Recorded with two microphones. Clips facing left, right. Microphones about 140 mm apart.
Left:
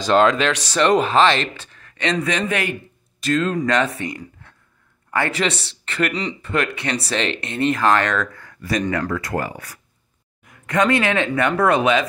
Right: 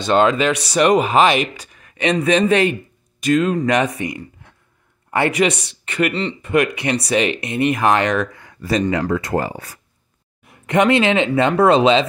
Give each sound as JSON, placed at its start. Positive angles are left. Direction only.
{"t": 0.0, "sound": "speech", "side_deg": -5}
{"t": 3.2, "sound": "speech", "side_deg": -15}